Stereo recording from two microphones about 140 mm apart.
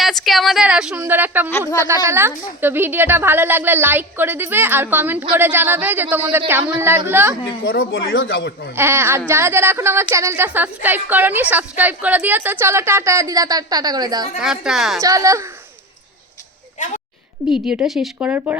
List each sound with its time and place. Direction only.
0.0 s a woman's voice: centre (ahead or behind)
1.5 s speech: 15° left (ahead or behind)
2.0 s a woman's voice: 15° right (ahead or behind)
8.7 s a woman's voice: 15° right (ahead or behind)
14.3 s a woman's voice: 5° right (ahead or behind)
15.0 s a woman's voice: 25° right (ahead or behind)
17.5 s a woman's voice: 5° right (ahead or behind)